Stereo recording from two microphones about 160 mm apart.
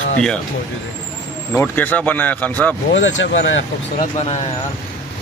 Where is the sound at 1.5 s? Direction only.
15° left (ahead or behind).